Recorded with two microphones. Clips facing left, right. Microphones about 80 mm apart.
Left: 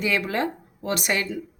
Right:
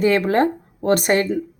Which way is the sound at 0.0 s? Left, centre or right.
Right.